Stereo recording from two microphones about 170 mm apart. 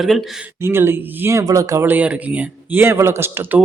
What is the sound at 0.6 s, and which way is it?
Speech, 15° right (ahead or behind).